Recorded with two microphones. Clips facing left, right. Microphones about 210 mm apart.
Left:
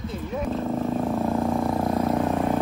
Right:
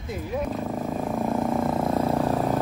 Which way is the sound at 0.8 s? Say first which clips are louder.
Left 1 dB; centre (ahead or behind).